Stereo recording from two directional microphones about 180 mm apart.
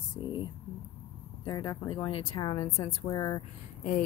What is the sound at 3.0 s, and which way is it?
Speech, 20° left (ahead or behind).